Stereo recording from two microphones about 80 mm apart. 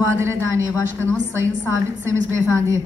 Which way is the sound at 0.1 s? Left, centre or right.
Right.